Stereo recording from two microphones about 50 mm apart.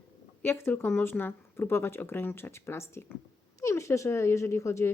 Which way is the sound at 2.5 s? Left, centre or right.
Left.